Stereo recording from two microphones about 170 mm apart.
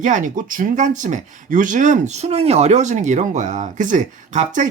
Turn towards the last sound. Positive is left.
turn(degrees=-45)  # may be behind; listen again after turning